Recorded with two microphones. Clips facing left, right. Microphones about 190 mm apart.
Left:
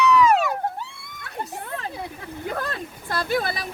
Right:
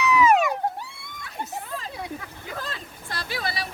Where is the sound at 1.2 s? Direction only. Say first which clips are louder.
Left 2 dB; 60° left (ahead or behind).